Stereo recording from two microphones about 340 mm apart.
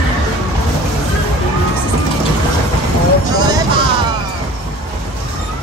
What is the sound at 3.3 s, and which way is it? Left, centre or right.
Music, centre.